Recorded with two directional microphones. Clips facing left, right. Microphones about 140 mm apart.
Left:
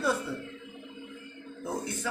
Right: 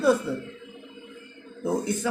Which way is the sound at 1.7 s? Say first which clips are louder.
Right 8 dB; 20° right (ahead or behind).